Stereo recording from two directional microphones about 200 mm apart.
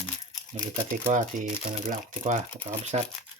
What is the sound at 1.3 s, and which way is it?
Speech, 40° right (ahead or behind).